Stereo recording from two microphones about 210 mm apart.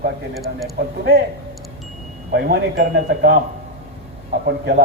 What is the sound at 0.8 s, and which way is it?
Speech, 50° right (ahead or behind).